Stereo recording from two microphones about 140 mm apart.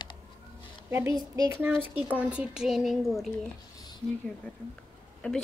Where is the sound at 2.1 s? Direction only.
10° right (ahead or behind).